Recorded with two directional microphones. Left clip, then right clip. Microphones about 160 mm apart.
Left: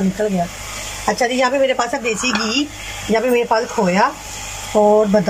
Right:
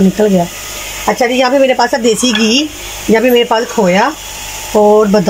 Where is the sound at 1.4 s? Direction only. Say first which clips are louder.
Right 7 dB; 30° right (ahead or behind).